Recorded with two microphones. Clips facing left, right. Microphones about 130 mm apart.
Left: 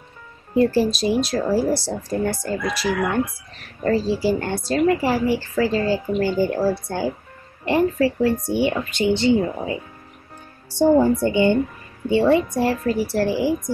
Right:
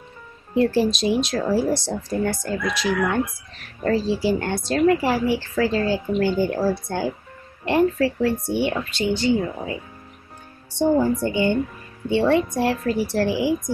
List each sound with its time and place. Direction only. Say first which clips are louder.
0.6 s a woman's voice: left 1 dB; 5° left (ahead or behind)
9.1 s speech: left 3 dB; 25° left (ahead or behind)
12.1 s a woman's voice: left 2 dB; 5° left (ahead or behind)